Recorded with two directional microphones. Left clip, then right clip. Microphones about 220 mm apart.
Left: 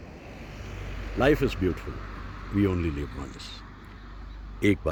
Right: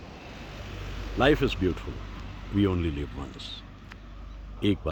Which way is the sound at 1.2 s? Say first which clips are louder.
Even; centre (ahead or behind).